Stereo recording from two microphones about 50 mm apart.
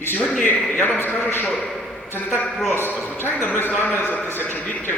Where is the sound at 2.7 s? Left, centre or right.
Left.